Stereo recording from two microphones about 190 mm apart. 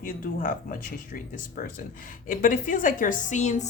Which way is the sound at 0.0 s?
45° left (ahead or behind).